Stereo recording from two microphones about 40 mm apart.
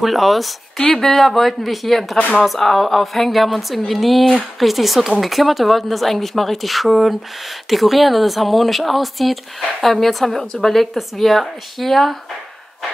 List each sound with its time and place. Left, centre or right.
0.0 s speech: centre
2.1 s speech: left
2.4 s speech: centre